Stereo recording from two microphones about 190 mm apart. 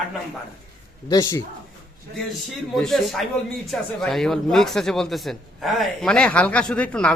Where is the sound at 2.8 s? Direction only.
Centre (ahead or behind).